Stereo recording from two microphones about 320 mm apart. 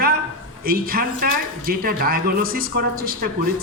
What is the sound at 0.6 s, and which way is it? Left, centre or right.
Speech, right.